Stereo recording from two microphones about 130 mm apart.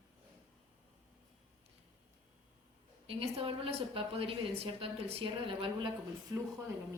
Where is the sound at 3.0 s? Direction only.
45° right (ahead or behind).